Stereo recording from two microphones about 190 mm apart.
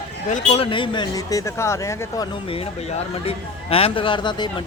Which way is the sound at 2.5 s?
30° left (ahead or behind).